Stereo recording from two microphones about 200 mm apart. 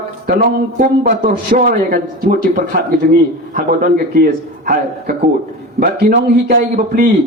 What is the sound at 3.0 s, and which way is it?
A man's voice, 45° right (ahead or behind).